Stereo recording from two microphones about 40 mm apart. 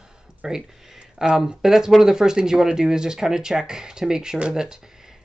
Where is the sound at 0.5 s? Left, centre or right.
Centre.